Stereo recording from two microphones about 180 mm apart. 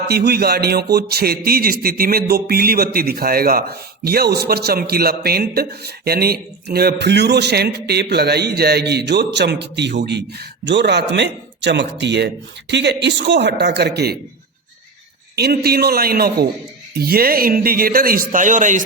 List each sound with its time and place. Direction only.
0.1 s a man's voice: 60° right (ahead or behind)
15.4 s a man's voice: 60° right (ahead or behind); by 18.8 s 45° right (ahead or behind)